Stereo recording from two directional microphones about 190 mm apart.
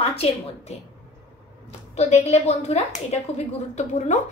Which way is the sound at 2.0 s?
35° left (ahead or behind).